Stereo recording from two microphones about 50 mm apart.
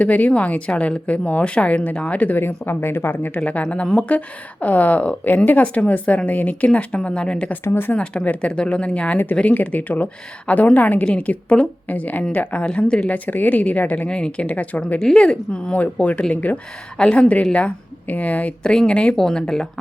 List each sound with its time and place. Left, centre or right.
0.0 s a woman's voice: left
2.6 s speech: left
3.4 s a woman's voice: left
7.7 s speech: left
7.9 s a woman's voice: left
9.6 s a woman's voice: left
12.7 s a woman's voice: centre
13.1 s speech: left
14.1 s a woman's voice: centre
14.4 s speech: left
14.9 s a woman's voice: centre; by 18.5 s left
18.6 s a woman's voice: centre
19.1 s speech: centre